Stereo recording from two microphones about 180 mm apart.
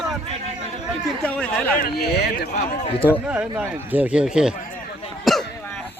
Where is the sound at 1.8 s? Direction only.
60° left (ahead or behind).